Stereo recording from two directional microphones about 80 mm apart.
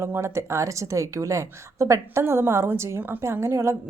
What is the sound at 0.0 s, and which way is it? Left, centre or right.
A woman's voice, right.